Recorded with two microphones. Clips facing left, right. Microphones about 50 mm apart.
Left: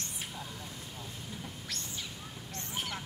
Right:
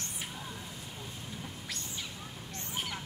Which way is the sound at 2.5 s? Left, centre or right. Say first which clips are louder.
Even; centre.